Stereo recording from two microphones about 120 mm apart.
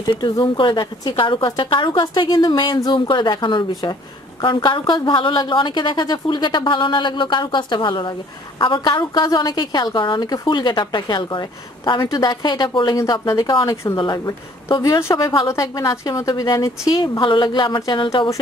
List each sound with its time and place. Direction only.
0.0 s a woman's voice: 40° left (ahead or behind)